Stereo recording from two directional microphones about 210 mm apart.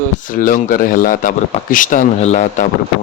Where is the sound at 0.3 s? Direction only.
40° left (ahead or behind).